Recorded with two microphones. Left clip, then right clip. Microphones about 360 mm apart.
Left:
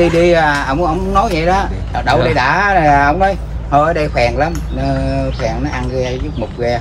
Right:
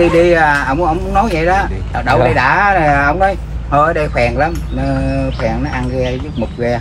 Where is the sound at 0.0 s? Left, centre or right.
Centre.